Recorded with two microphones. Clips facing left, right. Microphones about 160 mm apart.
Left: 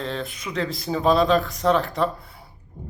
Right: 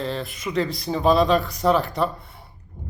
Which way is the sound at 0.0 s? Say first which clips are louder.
Right 2 dB; centre (ahead or behind).